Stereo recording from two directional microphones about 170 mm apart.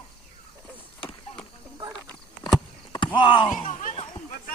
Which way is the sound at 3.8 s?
45° left (ahead or behind).